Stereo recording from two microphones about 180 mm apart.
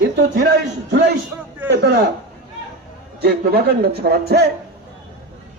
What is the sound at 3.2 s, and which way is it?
A man's voice, 60° right (ahead or behind).